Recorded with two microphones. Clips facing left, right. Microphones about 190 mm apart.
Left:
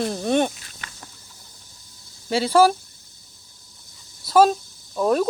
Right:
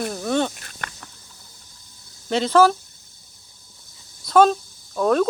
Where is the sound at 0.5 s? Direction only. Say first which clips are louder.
Right 6 dB; 60° right (ahead or behind).